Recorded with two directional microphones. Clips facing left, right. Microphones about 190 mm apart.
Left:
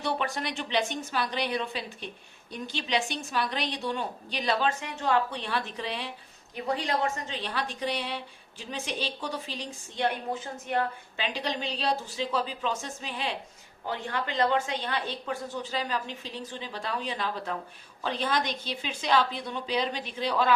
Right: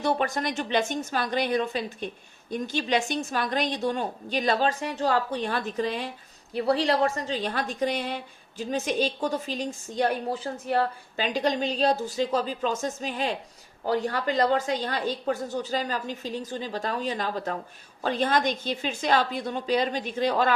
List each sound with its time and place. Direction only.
0.0 s a woman's voice: 45° right (ahead or behind)